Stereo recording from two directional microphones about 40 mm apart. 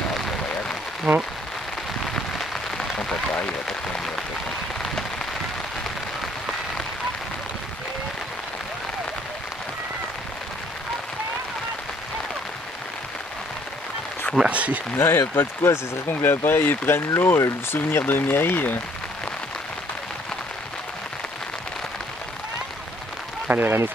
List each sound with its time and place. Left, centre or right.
1.1 s speech: centre
2.1 s rain on surface: centre
4.7 s a sound: centre
14.4 s speech: right
15.0 s speech: left
23.5 s speech: right